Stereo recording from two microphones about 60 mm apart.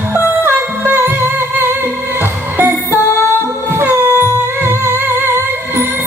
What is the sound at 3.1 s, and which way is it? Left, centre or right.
Music, left.